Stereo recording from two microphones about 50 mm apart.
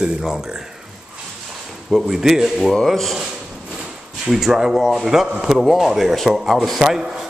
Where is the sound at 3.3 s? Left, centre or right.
Centre.